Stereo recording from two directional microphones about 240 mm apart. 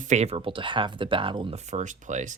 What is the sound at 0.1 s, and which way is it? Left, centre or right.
Speech, right.